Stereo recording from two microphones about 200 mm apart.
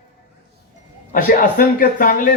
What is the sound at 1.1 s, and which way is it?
A man's voice, 45° left (ahead or behind).